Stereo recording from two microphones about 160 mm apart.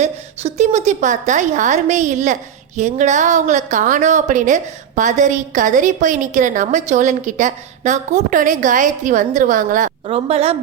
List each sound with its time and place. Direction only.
0.0 s a woman's voice: 45° right (ahead or behind)
10.1 s a woman's voice: 40° right (ahead or behind)